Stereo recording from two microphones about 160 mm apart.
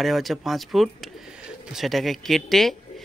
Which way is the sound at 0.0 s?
Centre (ahead or behind).